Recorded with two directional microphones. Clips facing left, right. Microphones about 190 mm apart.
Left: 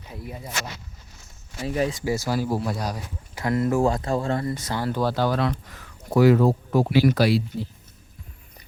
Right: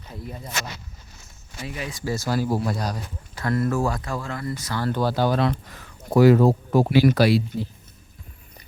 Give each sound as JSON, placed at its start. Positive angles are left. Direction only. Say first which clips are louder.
{"t": 0.1, "sound": "speech", "louder": "even", "side_deg": 10}
{"t": 1.6, "sound": "speech", "louder": "left 8 dB", "side_deg": 40}
{"t": 1.9, "sound": "speech", "louder": "left 1 dB", "side_deg": 15}
{"t": 3.3, "sound": "speech", "louder": "left 1 dB", "side_deg": 15}
{"t": 4.8, "sound": "speech", "louder": "right 1 dB", "side_deg": 5}
{"t": 5.1, "sound": "speech", "louder": "right 1 dB", "side_deg": -15}
{"t": 5.4, "sound": "speech", "louder": "right 2 dB", "side_deg": -30}
{"t": 6.9, "sound": "speech", "louder": "right 2 dB", "side_deg": -65}